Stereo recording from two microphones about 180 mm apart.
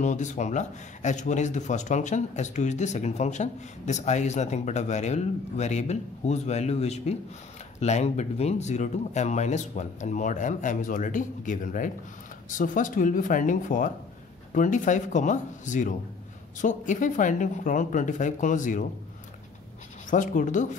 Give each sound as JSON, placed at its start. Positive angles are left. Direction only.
{"t": 0.0, "sound": "speech", "side_deg": 40}
{"t": 20.1, "sound": "speech", "side_deg": 45}